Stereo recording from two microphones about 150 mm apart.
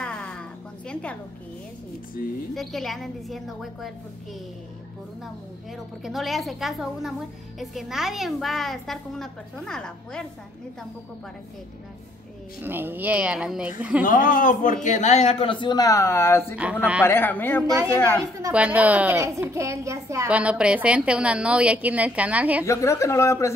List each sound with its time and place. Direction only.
0.0 s a sound: 5° left (ahead or behind)
2.2 s speech: 75° left (ahead or behind)
2.5 s a woman's voice: centre (ahead or behind)
6.0 s a woman's voice: centre (ahead or behind)
12.6 s a woman's voice: 15° right (ahead or behind)
14.0 s a man's voice: 65° left (ahead or behind); by 17.6 s 15° left (ahead or behind)
17.6 s a woman's voice: 20° right (ahead or behind)
18.5 s a woman's voice: 10° right (ahead or behind)
20.2 s a woman's voice: 10° right (ahead or behind)
22.7 s speech: 20° left (ahead or behind)